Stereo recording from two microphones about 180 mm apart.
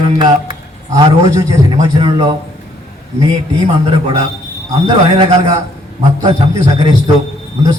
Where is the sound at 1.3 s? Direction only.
20° right (ahead or behind).